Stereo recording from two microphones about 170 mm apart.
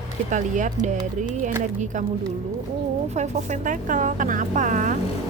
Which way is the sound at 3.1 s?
45° right (ahead or behind).